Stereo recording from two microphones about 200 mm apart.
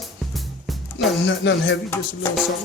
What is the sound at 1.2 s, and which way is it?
Speech, 65° left (ahead or behind).